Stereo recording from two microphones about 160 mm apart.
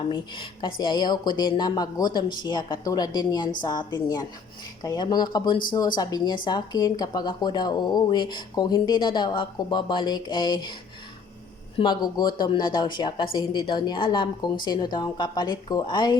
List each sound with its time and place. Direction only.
0.1 s speech: 30° left (ahead or behind)
11.8 s speech: 25° left (ahead or behind)